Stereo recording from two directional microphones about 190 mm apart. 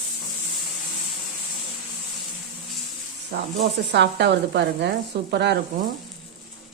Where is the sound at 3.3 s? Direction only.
60° right (ahead or behind).